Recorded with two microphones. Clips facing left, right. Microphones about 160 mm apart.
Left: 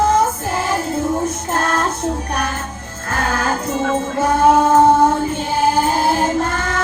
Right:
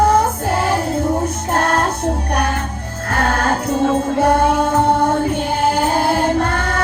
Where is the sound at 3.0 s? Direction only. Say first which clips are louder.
Right 2 dB; 60° right (ahead or behind).